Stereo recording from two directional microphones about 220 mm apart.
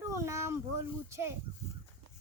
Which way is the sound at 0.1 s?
15° right (ahead or behind).